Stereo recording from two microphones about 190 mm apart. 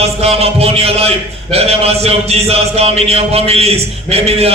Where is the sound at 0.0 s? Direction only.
35° right (ahead or behind).